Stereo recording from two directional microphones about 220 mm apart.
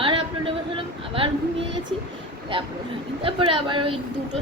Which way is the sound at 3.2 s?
25° right (ahead or behind).